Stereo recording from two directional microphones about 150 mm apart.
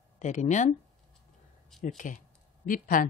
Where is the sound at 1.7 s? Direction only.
Centre (ahead or behind).